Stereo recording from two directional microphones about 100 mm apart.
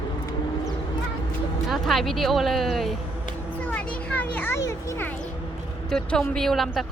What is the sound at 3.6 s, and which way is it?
Children playing, 15° left (ahead or behind).